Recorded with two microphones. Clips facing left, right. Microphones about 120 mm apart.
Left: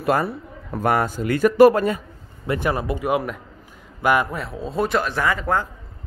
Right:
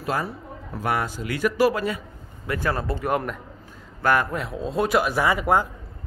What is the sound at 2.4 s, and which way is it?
Speech, 20° left (ahead or behind).